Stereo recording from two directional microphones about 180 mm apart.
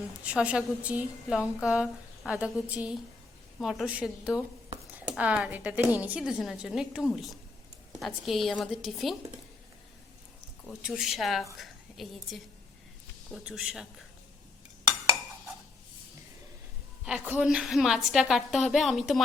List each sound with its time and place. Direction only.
0.2 s a woman's voice: 5° right (ahead or behind)
10.7 s a woman's voice: 5° right (ahead or behind)
17.1 s a woman's voice: 10° right (ahead or behind)